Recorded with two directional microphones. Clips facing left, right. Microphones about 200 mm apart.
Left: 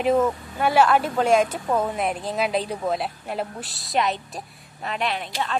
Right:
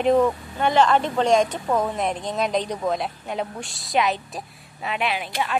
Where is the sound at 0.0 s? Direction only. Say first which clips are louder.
Right 2 dB; 5° left (ahead or behind).